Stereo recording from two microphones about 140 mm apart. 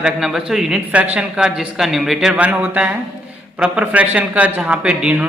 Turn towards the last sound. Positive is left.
turn(degrees=-10)  # may be behind; listen again after turning